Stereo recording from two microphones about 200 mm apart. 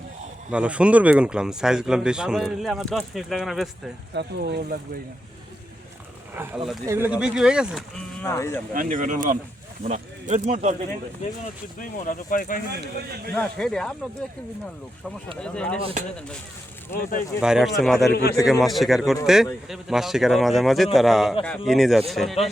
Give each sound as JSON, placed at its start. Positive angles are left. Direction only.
{"t": 0.5, "sound": "speech", "side_deg": -5}
{"t": 4.1, "sound": "speech", "side_deg": -55}
{"t": 6.3, "sound": "speech", "side_deg": -10}
{"t": 8.2, "sound": "speech", "side_deg": 15}
{"t": 8.7, "sound": "speech", "side_deg": -40}
{"t": 11.8, "sound": "speech", "side_deg": 40}
{"t": 12.8, "sound": "a man's voice", "side_deg": -50}
{"t": 13.3, "sound": "speech", "side_deg": 5}
{"t": 15.4, "sound": "speech", "side_deg": 5}
{"t": 17.0, "sound": "speech", "side_deg": 40}
{"t": 17.4, "sound": "speech", "side_deg": -5}
{"t": 18.1, "sound": "speech", "side_deg": 50}
{"t": 18.6, "sound": "speech", "side_deg": 0}